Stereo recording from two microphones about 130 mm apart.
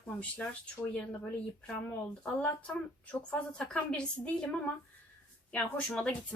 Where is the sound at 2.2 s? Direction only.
10° left (ahead or behind).